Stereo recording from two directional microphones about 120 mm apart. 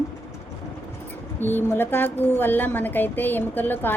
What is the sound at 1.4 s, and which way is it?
A woman's voice, 15° left (ahead or behind).